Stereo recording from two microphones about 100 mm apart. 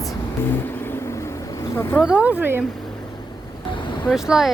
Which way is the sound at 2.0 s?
10° right (ahead or behind).